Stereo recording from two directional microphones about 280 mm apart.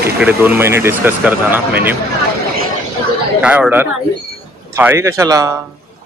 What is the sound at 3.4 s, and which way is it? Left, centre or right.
A man's voice, centre.